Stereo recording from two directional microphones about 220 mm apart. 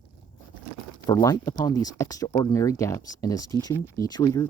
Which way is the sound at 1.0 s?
20° left (ahead or behind).